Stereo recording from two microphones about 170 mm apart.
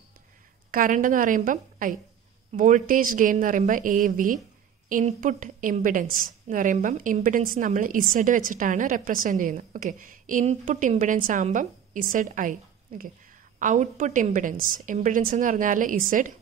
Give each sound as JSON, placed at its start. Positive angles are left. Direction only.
{"t": 0.7, "sound": "a woman's voice", "side_deg": -55}